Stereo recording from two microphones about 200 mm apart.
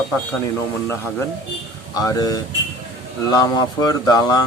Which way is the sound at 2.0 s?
15° left (ahead or behind).